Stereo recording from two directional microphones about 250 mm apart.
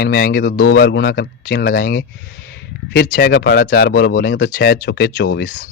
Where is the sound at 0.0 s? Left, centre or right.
Left.